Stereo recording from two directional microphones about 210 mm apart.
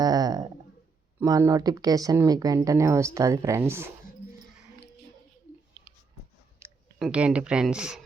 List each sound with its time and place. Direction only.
0.0 s a sound: 20° right (ahead or behind)
1.2 s speech: 15° right (ahead or behind)
6.6 s clicking: 15° right (ahead or behind)
7.0 s speech: 5° right (ahead or behind)